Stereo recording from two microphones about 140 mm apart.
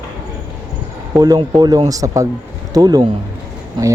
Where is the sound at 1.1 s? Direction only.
25° right (ahead or behind).